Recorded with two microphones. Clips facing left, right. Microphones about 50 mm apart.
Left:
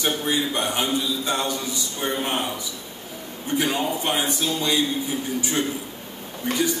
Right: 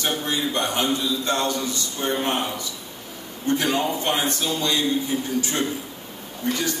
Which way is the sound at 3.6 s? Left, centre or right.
Centre.